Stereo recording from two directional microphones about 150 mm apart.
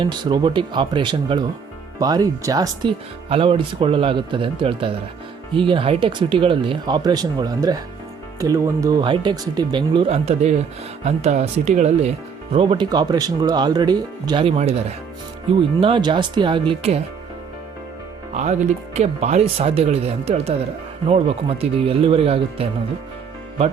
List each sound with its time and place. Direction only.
0.0 s speech: 30° right (ahead or behind)
3.2 s speech: 40° right (ahead or behind)
12.5 s speech: 35° right (ahead or behind)
15.8 s speech: 35° right (ahead or behind)
18.3 s speech: 50° right (ahead or behind)